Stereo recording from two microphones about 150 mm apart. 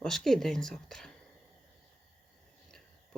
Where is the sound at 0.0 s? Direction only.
Centre (ahead or behind).